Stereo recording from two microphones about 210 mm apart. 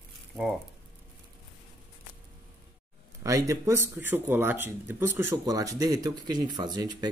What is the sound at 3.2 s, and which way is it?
Speech, 15° right (ahead or behind).